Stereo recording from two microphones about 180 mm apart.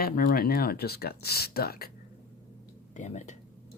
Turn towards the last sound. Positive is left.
turn(degrees=45)  # may be behind; listen again after turning